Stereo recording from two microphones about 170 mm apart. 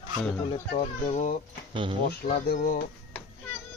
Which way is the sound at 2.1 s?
65° left (ahead or behind).